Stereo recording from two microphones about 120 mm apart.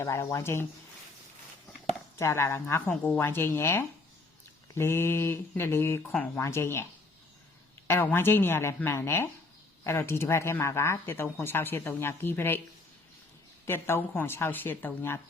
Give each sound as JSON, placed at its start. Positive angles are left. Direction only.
{"t": 0.0, "sound": "speech", "side_deg": 25}
{"t": 2.1, "sound": "speech", "side_deg": 25}
{"t": 7.9, "sound": "speech", "side_deg": 20}
{"t": 13.7, "sound": "speech", "side_deg": 20}